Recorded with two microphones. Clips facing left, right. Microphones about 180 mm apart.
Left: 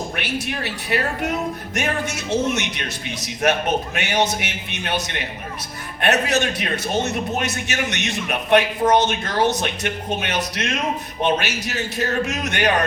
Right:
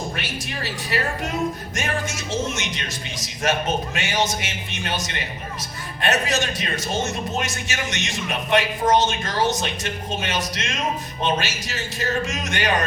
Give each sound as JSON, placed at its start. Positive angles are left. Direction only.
{"t": 0.2, "sound": "a man's voice", "side_deg": 60}